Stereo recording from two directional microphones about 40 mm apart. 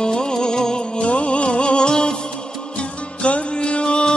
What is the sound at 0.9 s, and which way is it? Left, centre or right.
Music, left.